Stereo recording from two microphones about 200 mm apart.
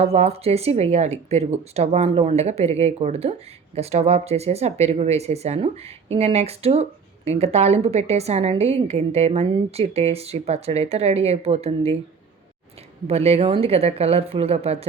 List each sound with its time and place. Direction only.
0.1 s speech: 30° right (ahead or behind)
13.1 s speech: 30° right (ahead or behind)